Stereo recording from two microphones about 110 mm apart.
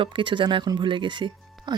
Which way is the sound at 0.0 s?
50° right (ahead or behind).